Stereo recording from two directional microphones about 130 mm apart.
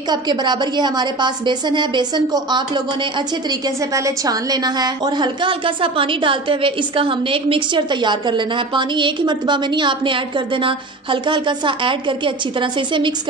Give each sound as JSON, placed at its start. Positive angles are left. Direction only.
{"t": 0.1, "sound": "a woman's voice", "side_deg": -35}